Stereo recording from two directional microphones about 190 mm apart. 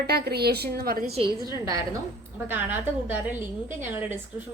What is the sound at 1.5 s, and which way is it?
A woman's voice, 20° right (ahead or behind).